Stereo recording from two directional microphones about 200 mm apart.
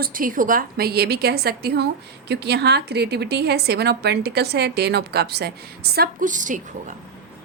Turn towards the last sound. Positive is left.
turn(degrees=-40)  # may be behind; listen again after turning